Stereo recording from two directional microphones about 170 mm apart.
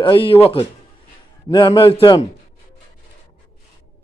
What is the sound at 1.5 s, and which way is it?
Speech, 25° left (ahead or behind).